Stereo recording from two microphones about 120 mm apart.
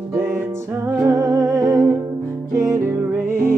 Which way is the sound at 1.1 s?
35° right (ahead or behind).